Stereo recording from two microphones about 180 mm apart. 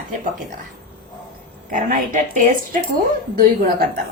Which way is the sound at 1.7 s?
50° right (ahead or behind).